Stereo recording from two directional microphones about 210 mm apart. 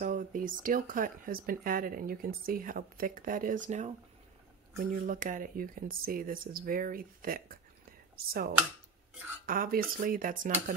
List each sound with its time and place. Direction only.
0.0 s speech: 40° right (ahead or behind)